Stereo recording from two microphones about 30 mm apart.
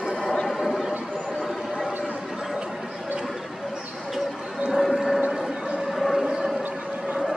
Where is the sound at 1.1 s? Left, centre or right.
Left.